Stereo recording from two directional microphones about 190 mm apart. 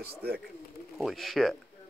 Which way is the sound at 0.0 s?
55° right (ahead or behind).